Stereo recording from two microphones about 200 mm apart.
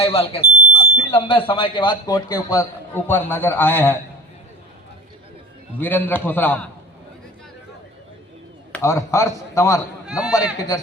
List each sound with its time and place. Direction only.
0.0 s speech: 30° left (ahead or behind); by 4.0 s 10° left (ahead or behind)
5.8 s a man's voice: 10° left (ahead or behind)
8.7 s a man's voice: 15° left (ahead or behind)
10.1 s speech: 5° right (ahead or behind)